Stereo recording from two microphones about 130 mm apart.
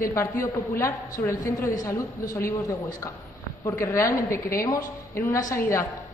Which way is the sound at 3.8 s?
25° left (ahead or behind).